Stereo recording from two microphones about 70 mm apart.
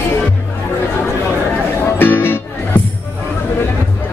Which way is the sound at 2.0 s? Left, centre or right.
Left.